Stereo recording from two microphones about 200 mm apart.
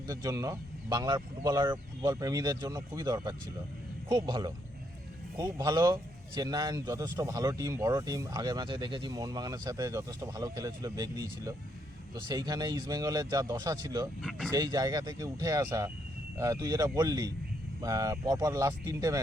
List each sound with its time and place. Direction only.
0.1 s speech: 15° right (ahead or behind)
14.2 s speech: centre (ahead or behind)
14.5 s speech: 20° right (ahead or behind)